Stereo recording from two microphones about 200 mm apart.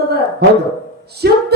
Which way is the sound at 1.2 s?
55° right (ahead or behind).